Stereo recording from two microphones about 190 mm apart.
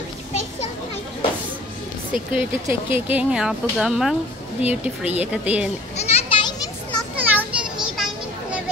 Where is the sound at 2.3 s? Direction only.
10° right (ahead or behind).